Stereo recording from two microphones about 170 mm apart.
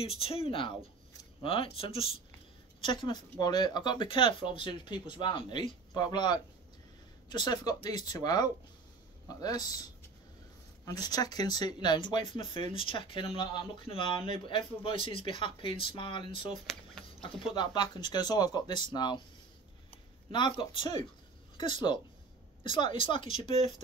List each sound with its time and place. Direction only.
0.0 s speech: 35° left (ahead or behind)
17.6 s speech: 25° left (ahead or behind)
20.2 s a woman's voice: 30° left (ahead or behind)